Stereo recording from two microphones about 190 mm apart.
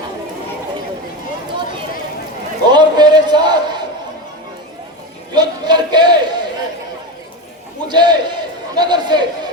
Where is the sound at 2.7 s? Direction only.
20° right (ahead or behind).